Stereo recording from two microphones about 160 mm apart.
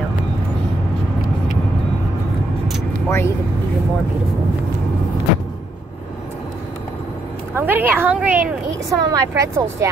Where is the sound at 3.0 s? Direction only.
15° left (ahead or behind).